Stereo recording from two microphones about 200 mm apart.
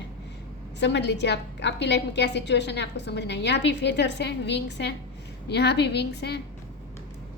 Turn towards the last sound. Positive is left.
turn(degrees=55)  # may be behind; listen again after turning